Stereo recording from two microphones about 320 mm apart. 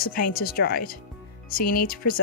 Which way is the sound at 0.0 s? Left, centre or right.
Left.